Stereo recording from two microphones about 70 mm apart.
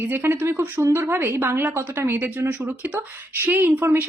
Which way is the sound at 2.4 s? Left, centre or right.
Right.